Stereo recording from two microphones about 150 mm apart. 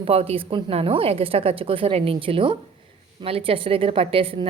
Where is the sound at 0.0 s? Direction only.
40° right (ahead or behind).